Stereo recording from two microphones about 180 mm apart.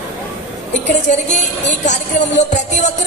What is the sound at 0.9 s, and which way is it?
Music, 40° left (ahead or behind).